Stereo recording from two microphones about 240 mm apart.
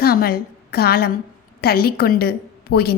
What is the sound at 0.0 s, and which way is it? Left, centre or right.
A woman's voice, left.